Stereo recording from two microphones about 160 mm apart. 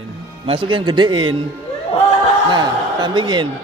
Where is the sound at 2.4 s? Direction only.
25° right (ahead or behind).